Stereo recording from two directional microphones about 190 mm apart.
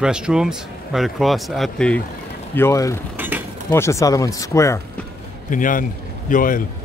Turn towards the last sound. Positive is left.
turn(degrees=45)  # may be behind; listen again after turning